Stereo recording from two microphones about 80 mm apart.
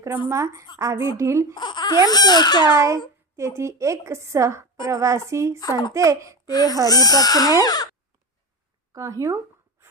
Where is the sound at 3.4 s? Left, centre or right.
Right.